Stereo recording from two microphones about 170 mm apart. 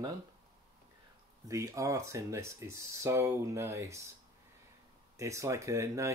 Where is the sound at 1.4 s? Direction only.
20° right (ahead or behind).